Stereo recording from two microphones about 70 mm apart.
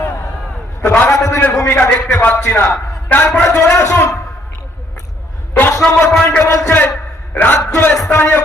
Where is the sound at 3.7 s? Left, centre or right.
Left.